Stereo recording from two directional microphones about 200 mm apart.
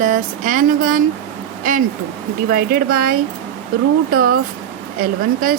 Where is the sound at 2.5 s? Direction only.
50° right (ahead or behind).